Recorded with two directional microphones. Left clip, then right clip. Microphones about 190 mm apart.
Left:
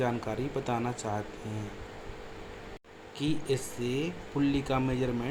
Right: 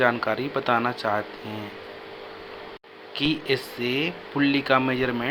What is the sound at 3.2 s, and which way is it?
Speech, 10° right (ahead or behind).